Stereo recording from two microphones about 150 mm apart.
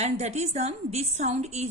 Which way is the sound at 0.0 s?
50° right (ahead or behind).